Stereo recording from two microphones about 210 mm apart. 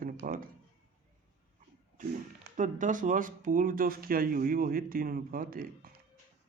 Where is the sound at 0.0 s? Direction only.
40° right (ahead or behind).